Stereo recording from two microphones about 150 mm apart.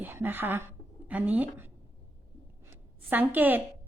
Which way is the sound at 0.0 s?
15° right (ahead or behind).